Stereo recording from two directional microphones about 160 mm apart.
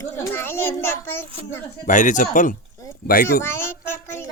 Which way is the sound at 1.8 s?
50° left (ahead or behind).